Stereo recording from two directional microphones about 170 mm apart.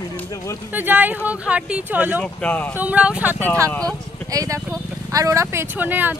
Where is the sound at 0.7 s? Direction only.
10° right (ahead or behind).